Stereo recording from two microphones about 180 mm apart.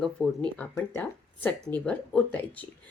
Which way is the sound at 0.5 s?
10° left (ahead or behind).